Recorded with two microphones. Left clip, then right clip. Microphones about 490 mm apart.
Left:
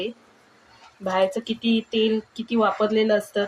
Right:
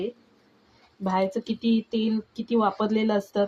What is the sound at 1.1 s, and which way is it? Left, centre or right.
Speech, right.